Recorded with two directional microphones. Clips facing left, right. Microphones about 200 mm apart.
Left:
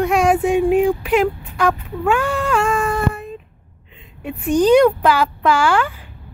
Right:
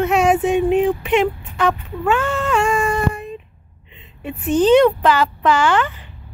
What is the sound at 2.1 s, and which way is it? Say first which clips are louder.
Cat: even; 10° left (ahead or behind).